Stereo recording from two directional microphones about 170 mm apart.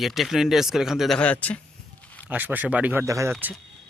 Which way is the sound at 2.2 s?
10° right (ahead or behind).